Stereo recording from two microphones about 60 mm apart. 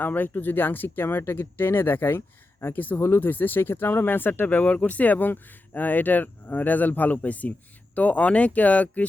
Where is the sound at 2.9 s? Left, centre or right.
Left.